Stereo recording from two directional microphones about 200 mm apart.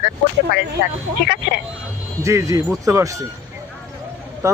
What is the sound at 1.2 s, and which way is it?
Speech, 55° left (ahead or behind).